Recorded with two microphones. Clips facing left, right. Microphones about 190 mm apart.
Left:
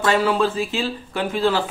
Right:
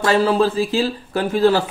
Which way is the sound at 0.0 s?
35° right (ahead or behind).